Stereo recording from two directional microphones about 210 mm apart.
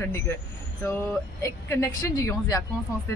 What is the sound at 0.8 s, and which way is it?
Speech, 10° left (ahead or behind).